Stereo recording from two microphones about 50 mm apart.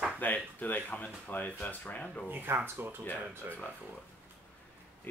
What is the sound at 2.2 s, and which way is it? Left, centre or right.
Speech, right.